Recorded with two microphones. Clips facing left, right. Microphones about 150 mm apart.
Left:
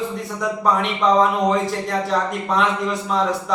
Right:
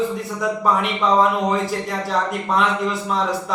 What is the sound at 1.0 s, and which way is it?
A man's voice, centre (ahead or behind).